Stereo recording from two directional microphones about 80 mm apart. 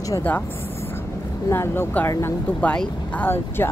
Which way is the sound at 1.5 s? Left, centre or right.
Left.